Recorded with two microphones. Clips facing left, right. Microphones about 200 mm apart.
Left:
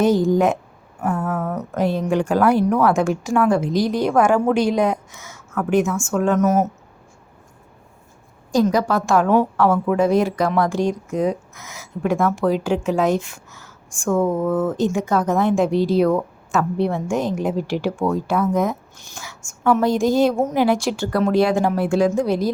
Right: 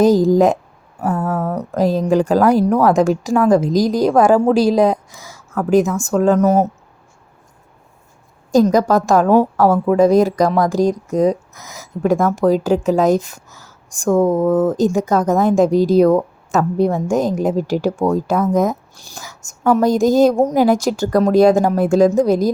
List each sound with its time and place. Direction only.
0.3 s a woman's voice: 35° right (ahead or behind)
8.5 s a woman's voice: 40° right (ahead or behind)